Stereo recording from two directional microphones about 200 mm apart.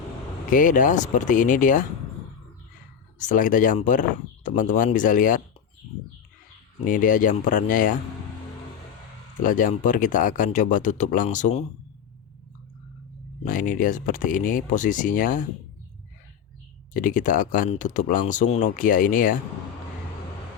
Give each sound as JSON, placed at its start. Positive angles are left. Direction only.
{"t": 0.5, "sound": "speech", "side_deg": 40}
{"t": 3.2, "sound": "speech", "side_deg": 40}
{"t": 6.8, "sound": "speech", "side_deg": 40}
{"t": 9.4, "sound": "speech", "side_deg": 40}
{"t": 13.4, "sound": "speech", "side_deg": 40}
{"t": 16.9, "sound": "speech", "side_deg": 40}